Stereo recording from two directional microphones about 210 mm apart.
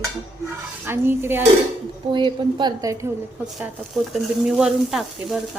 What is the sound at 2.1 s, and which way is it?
Speech, 20° right (ahead or behind).